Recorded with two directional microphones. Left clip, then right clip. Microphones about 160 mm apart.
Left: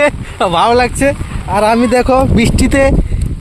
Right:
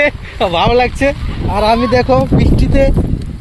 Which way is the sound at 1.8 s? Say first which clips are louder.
Left 1 dB; 60° left (ahead or behind).